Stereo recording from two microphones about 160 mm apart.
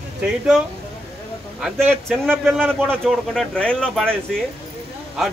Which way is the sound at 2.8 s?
5° left (ahead or behind).